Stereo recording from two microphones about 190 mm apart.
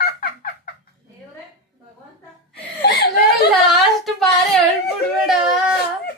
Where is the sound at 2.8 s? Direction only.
60° left (ahead or behind).